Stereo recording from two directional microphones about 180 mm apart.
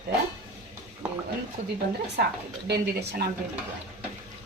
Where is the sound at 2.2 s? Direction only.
60° right (ahead or behind).